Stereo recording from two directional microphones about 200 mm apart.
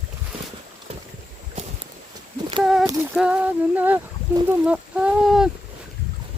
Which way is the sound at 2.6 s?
Centre (ahead or behind).